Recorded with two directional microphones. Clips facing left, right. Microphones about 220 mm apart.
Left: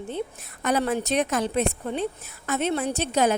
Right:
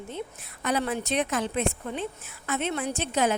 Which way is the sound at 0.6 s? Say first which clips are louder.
Left 4 dB; 45° left (ahead or behind).